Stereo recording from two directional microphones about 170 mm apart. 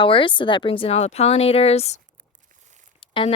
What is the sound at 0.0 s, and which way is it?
Speech, 30° left (ahead or behind).